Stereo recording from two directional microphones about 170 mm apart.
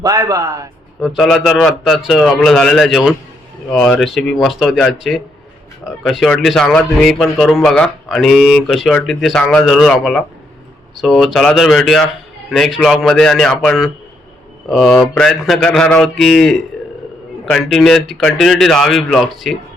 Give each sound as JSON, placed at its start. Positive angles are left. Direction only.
{"t": 0.0, "sound": "a man's voice", "side_deg": -20}
{"t": 1.0, "sound": "speech", "side_deg": 0}